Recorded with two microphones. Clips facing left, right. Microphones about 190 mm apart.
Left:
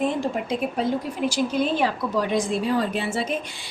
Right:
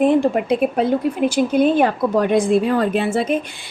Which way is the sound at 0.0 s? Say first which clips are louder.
Right 9 dB; 60° right (ahead or behind).